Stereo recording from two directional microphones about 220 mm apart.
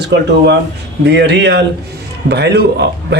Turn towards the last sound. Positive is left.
turn(degrees=-50)  # may be behind; listen again after turning